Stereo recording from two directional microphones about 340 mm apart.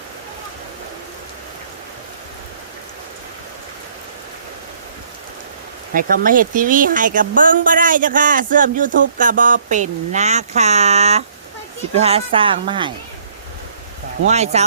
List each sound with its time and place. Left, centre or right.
5.9 s a woman's voice: right
14.3 s speech: centre